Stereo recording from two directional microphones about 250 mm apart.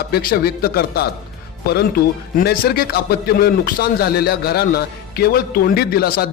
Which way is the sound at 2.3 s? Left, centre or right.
Left.